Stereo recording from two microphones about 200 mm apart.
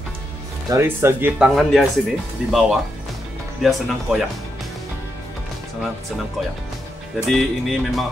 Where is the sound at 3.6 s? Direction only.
Centre (ahead or behind).